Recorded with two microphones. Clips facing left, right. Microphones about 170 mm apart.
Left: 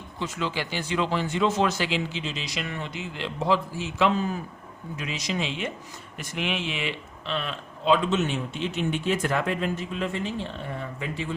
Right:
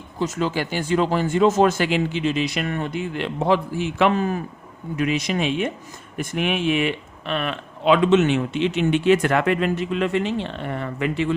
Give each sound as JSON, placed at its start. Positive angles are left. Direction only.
{"t": 0.2, "sound": "speech", "side_deg": -40}